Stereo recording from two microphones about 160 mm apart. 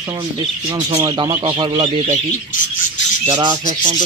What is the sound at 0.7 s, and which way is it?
Speech, 25° right (ahead or behind).